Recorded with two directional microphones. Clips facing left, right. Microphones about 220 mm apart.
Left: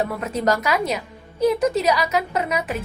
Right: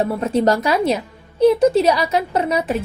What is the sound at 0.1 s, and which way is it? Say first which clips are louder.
A woman's voice: right 5 dB; 30° right (ahead or behind).